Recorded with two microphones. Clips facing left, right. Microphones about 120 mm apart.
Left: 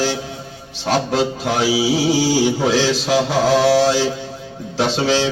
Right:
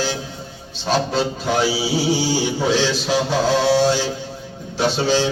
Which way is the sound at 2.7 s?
90° left.